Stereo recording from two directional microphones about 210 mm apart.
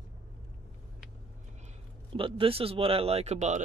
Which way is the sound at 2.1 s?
25° right (ahead or behind).